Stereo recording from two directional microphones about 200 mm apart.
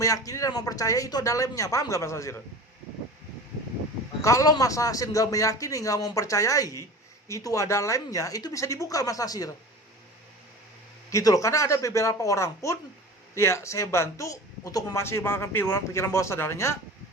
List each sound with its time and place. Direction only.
0.0 s speech: 15° left (ahead or behind)
4.2 s speech: 15° left (ahead or behind)
11.1 s speech: 15° left (ahead or behind)